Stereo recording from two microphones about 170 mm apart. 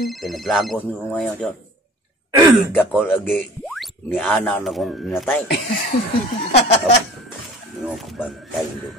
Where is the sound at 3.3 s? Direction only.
Centre (ahead or behind).